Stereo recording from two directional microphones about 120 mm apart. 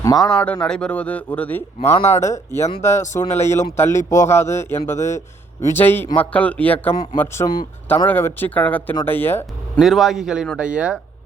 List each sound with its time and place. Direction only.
0.2 s speech: 5° left (ahead or behind)
2.1 s speech: 25° left (ahead or behind)
6.9 s speech: 35° left (ahead or behind)
7.9 s speech: 15° left (ahead or behind)
9.7 s a man's voice: centre (ahead or behind)